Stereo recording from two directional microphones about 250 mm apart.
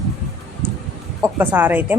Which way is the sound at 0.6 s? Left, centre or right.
Right.